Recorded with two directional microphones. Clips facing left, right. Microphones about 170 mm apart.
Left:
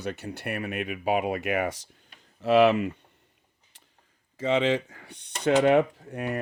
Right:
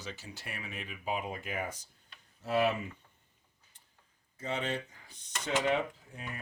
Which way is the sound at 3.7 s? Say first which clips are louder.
Left 10 dB; 85° left.